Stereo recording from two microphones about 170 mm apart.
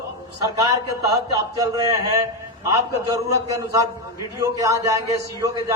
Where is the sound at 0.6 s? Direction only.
20° right (ahead or behind).